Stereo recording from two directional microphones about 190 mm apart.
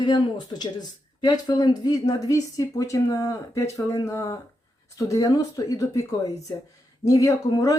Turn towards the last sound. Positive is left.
turn(degrees=20)  # may be behind; listen again after turning